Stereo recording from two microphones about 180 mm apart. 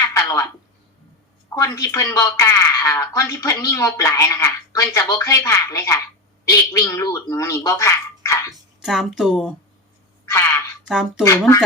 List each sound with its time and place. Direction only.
0.0 s a sound: 15° left (ahead or behind)
1.5 s speech: 15° left (ahead or behind)
8.8 s a woman's voice: centre (ahead or behind)
10.2 s speech: 15° left (ahead or behind)
10.8 s a woman's voice: 5° right (ahead or behind)
11.2 s speech: 15° left (ahead or behind)